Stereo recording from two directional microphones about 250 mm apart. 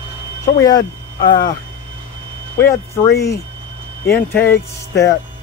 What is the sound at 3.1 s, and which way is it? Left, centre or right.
Speech, centre.